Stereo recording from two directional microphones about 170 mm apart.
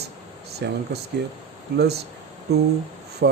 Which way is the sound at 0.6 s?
75° right (ahead or behind).